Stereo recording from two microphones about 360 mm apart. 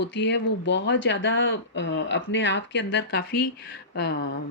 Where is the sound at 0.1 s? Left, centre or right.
Left.